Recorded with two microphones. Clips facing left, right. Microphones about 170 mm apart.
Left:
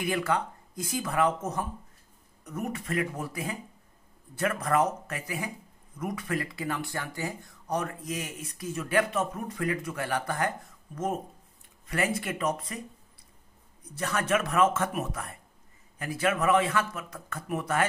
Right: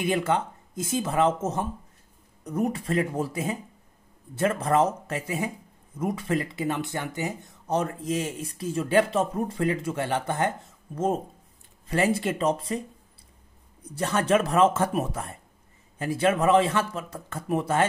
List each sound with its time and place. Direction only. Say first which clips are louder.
0.0 s speech: right 4 dB; 25° right (ahead or behind)
13.9 s speech: right 5 dB; 30° right (ahead or behind)